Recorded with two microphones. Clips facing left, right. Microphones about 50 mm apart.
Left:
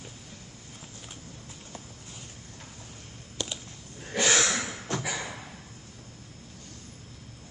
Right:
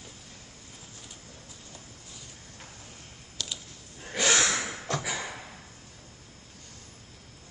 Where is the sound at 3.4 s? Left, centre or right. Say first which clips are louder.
Left 2 dB; left.